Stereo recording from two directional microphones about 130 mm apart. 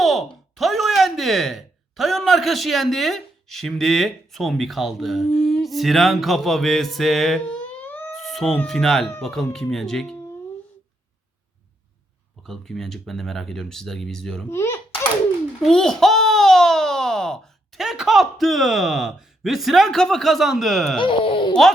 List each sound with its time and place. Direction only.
0.0 s a sound: centre (ahead or behind)
0.5 s speech: centre (ahead or behind)
8.1 s music: centre (ahead or behind)
8.5 s speech: 5° left (ahead or behind)
12.4 s speech: 5° left (ahead or behind)
14.5 s a child's voice: 20° left (ahead or behind)
15.6 s speech: 5° left (ahead or behind)
21.0 s speech: 45° left (ahead or behind)